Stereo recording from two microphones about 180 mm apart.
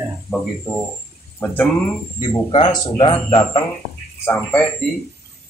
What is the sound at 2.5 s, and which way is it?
Speech, 25° left (ahead or behind).